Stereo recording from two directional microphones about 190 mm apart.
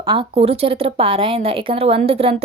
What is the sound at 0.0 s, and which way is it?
A woman's voice, 25° right (ahead or behind).